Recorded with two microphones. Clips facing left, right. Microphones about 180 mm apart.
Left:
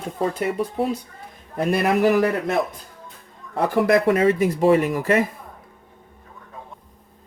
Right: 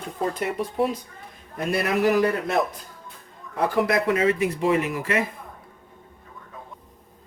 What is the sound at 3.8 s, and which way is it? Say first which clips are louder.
Speech: left 6 dB; 40° left (ahead or behind).